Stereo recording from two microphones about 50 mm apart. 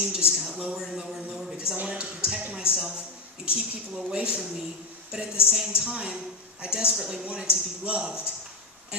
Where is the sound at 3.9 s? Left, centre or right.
Centre.